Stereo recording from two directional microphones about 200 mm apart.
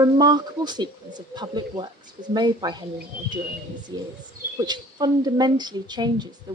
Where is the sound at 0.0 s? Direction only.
20° right (ahead or behind).